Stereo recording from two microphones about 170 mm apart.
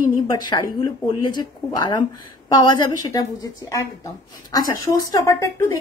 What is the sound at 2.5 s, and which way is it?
A woman's voice, 25° left (ahead or behind).